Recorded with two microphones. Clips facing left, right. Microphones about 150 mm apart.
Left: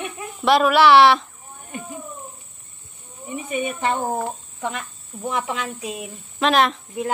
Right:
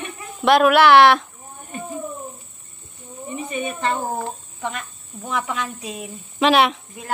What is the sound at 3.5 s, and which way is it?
Speech, 10° left (ahead or behind).